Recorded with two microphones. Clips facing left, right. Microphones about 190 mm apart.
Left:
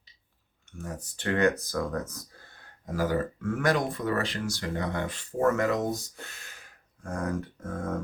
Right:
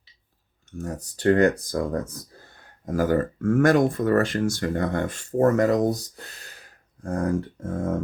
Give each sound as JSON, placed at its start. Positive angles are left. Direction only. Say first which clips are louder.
{"t": 0.8, "sound": "speech", "louder": "right 8 dB", "side_deg": -40}
{"t": 2.8, "sound": "speech", "louder": "right 6 dB", "side_deg": -50}